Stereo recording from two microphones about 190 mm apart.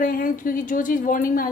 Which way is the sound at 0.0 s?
45° left (ahead or behind).